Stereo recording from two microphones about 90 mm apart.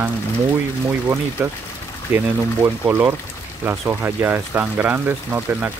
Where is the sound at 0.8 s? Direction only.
25° right (ahead or behind).